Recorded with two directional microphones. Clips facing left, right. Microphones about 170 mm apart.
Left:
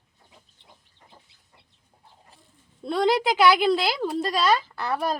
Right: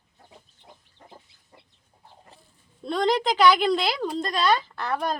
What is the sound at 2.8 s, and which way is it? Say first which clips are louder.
A woman's voice: left 1 dB; 5° left (ahead or behind).